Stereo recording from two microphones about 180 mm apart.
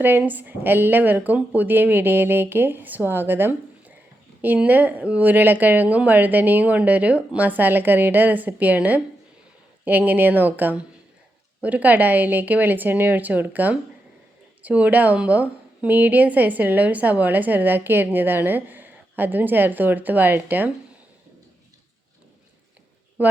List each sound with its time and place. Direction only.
0.0 s a woman's voice: 10° right (ahead or behind)
23.2 s speech: 10° right (ahead or behind)